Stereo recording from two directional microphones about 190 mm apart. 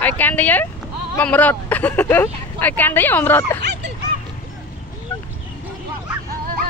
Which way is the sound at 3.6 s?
65° right (ahead or behind).